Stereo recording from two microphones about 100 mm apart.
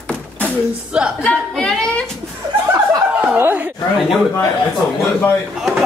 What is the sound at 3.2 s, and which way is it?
Speech, 20° right (ahead or behind).